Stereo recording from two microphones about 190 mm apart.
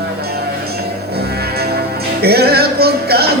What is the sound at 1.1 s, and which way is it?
Music, 55° right (ahead or behind).